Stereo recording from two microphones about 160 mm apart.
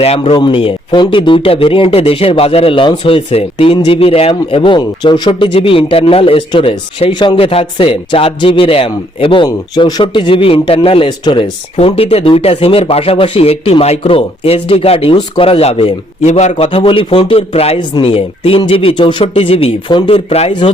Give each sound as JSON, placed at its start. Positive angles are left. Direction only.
{"t": 0.0, "sound": "speech", "side_deg": 40}